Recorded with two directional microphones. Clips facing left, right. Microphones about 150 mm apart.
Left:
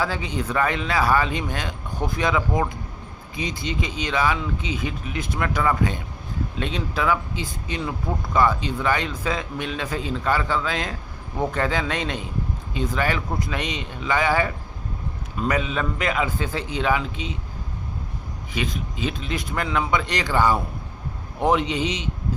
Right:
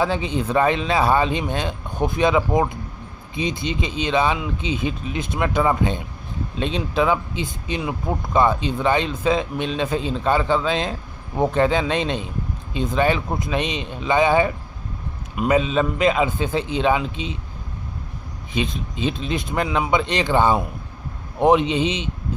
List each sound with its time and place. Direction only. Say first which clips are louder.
0.0 s speech: right 4 dB; 20° right (ahead or behind)
18.5 s speech: right 3 dB; 25° right (ahead or behind)